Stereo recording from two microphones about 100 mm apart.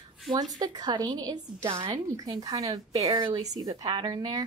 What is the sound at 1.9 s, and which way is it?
Speech, 40° right (ahead or behind).